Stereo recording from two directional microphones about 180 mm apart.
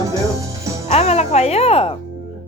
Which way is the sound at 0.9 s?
35° left (ahead or behind).